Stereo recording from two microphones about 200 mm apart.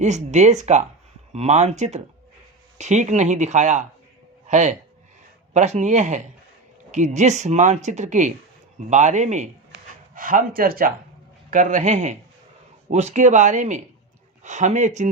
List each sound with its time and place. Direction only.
0.0 s speech: 35° right (ahead or behind)